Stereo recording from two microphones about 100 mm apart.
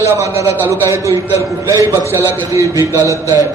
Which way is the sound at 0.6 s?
30° right (ahead or behind).